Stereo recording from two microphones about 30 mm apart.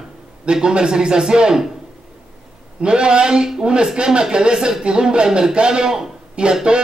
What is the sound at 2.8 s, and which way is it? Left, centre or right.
A man's voice, right.